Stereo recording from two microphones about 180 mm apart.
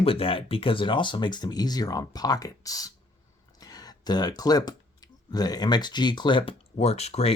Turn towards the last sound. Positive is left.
turn(degrees=35)  # may be behind; listen again after turning